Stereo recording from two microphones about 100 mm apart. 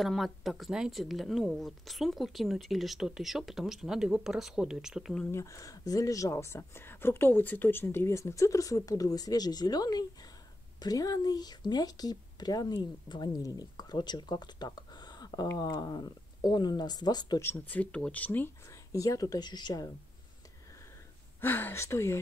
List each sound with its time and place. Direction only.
0.0 s speech: centre (ahead or behind)
5.3 s speech: 30° left (ahead or behind)
17.4 s speech: 20° left (ahead or behind)
18.9 s speech: 35° left (ahead or behind)
21.4 s speech: 20° left (ahead or behind)